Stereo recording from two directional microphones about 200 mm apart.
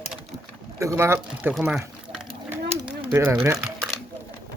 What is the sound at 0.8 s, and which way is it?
Speech, 15° right (ahead or behind).